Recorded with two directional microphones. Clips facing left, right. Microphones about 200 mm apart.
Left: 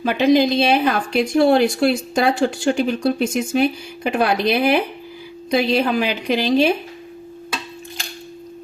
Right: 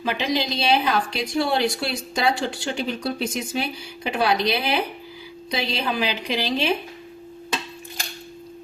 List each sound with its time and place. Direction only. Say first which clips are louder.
0.0 s a woman's voice: left 9 dB; 50° left (ahead or behind)